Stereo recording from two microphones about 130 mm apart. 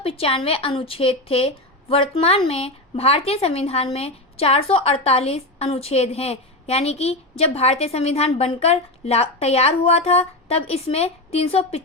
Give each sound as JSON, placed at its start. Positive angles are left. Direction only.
{"t": 0.0, "sound": "a woman's voice", "side_deg": 50}